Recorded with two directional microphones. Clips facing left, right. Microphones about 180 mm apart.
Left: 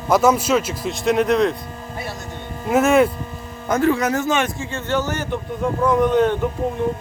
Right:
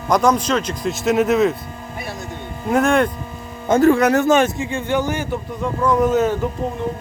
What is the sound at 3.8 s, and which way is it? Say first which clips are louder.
Speech: right 5 dB; 60° right (ahead or behind).